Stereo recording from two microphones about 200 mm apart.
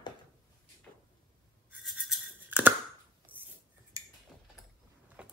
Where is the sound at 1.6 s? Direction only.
5° right (ahead or behind).